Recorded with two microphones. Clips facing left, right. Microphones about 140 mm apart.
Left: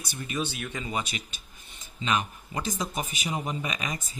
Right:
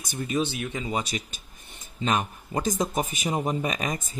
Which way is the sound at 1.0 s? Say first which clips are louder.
Right 5 dB; 40° right (ahead or behind).